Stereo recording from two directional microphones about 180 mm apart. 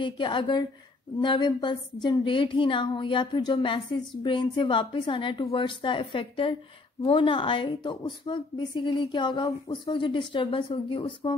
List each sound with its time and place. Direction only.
0.0 s speech: 25° left (ahead or behind)